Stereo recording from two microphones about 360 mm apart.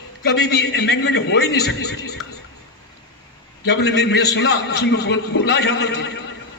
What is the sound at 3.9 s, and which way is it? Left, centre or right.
A man's voice, left.